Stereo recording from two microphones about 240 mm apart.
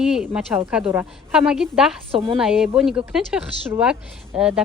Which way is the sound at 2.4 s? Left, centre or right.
Centre.